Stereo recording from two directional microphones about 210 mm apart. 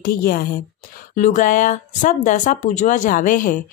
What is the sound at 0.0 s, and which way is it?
A woman's voice, 45° left (ahead or behind).